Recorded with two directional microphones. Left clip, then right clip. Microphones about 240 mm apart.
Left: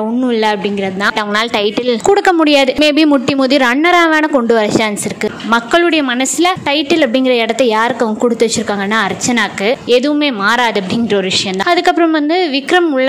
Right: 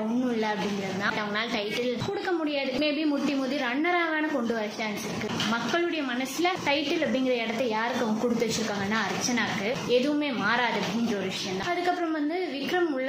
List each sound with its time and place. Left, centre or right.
0.3 s a woman's voice: left
8.9 s a woman's voice: left
11.7 s a woman's voice: left